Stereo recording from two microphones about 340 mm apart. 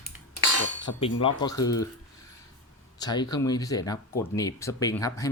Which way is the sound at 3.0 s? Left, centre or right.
Centre.